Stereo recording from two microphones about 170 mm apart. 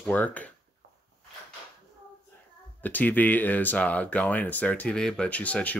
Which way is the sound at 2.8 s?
10° left (ahead or behind).